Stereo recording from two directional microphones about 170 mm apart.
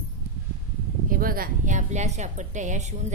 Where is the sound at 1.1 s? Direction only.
60° right (ahead or behind).